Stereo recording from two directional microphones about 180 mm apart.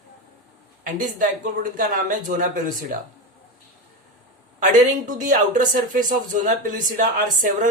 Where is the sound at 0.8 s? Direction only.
45° right (ahead or behind).